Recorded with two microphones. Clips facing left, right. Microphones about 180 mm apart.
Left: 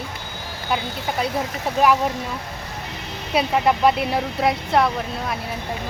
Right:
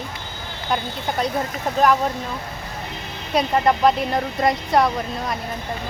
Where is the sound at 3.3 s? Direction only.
5° left (ahead or behind).